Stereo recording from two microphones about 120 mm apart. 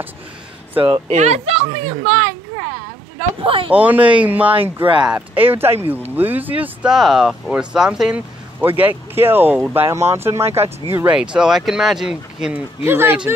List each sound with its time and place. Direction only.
1.0 s speech: 70° right (ahead or behind); by 2.2 s 50° right (ahead or behind)
3.3 s speech: 45° right (ahead or behind)
3.7 s speech: 15° right (ahead or behind)
11.1 s speech: 5° right (ahead or behind)
12.8 s speech: 20° right (ahead or behind)